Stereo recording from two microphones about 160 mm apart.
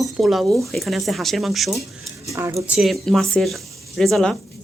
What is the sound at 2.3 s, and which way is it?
Speech, 20° right (ahead or behind).